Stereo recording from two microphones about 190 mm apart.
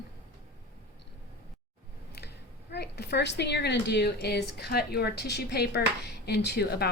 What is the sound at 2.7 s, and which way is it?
A woman's voice, 60° left (ahead or behind).